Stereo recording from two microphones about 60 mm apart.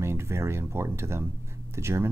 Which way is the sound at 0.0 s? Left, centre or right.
Right.